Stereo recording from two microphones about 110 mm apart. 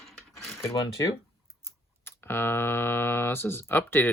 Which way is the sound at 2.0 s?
20° left (ahead or behind).